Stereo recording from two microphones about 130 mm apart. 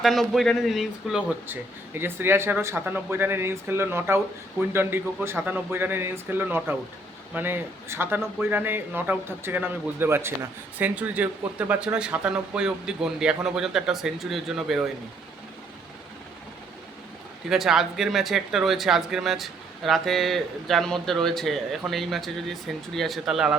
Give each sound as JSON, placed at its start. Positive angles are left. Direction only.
{"t": 0.0, "sound": "speech", "side_deg": 0}
{"t": 2.0, "sound": "speech", "side_deg": -15}
{"t": 17.5, "sound": "speech", "side_deg": -5}